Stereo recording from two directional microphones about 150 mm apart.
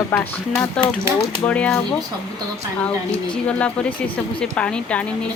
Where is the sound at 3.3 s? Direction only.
5° left (ahead or behind).